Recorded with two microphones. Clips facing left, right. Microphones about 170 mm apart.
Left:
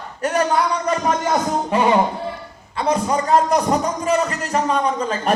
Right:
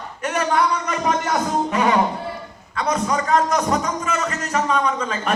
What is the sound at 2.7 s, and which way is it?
A man's voice, 30° left (ahead or behind).